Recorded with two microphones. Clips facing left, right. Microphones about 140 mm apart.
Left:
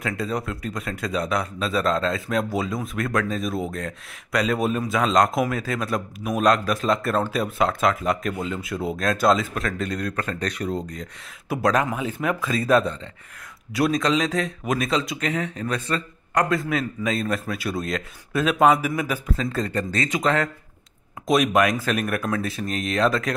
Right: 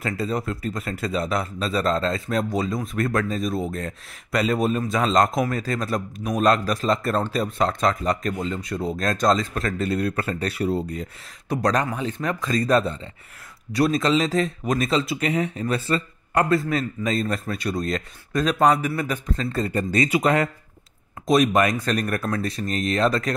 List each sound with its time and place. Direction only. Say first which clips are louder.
0.0 s a man's voice: right 1 dB; centre (ahead or behind)
11.4 s a man's voice: left 1 dB; 5° left (ahead or behind)
21.3 s a man's voice: right 1 dB; centre (ahead or behind)